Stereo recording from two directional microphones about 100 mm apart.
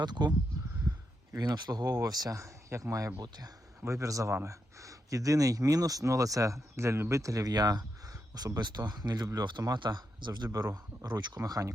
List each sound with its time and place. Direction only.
0.0 s speech: 45° right (ahead or behind)
1.4 s speech: 45° right (ahead or behind)